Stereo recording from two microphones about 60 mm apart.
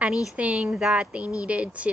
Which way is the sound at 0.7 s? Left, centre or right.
Centre.